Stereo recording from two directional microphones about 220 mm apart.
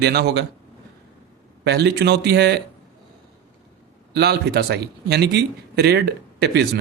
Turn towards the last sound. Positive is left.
turn(degrees=-50)  # may be behind; listen again after turning